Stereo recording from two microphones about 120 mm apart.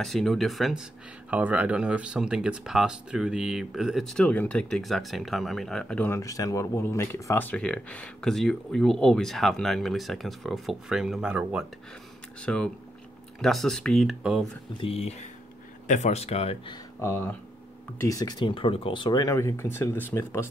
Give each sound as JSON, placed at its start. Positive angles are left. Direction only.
{"t": 0.0, "sound": "speech", "side_deg": 0}
{"t": 1.3, "sound": "speech", "side_deg": -10}
{"t": 6.0, "sound": "speech", "side_deg": 25}
{"t": 12.4, "sound": "speech", "side_deg": 10}
{"t": 14.8, "sound": "speech", "side_deg": 55}
{"t": 15.9, "sound": "speech", "side_deg": 70}
{"t": 17.0, "sound": "speech", "side_deg": 20}
{"t": 19.3, "sound": "speech", "side_deg": 25}